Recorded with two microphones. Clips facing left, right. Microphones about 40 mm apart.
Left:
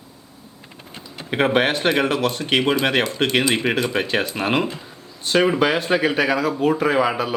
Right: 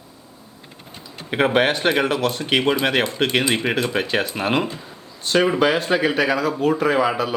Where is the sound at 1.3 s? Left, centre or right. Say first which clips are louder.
Even; centre.